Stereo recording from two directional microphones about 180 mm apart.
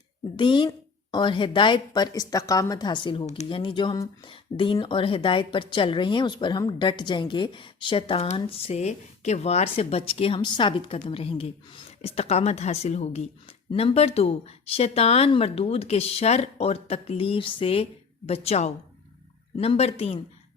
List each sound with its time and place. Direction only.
0.3 s a woman's voice: 25° left (ahead or behind)